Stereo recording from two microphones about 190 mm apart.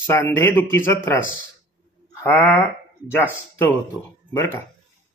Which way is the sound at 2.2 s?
10° left (ahead or behind).